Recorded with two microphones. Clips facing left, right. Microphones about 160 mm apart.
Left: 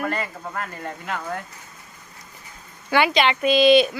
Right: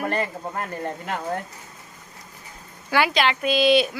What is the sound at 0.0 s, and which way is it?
Speech, 25° right (ahead or behind).